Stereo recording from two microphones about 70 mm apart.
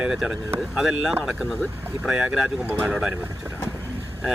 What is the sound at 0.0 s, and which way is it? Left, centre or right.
Speech, centre.